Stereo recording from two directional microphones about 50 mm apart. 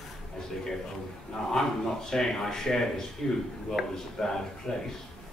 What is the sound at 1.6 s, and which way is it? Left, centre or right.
Speech, centre.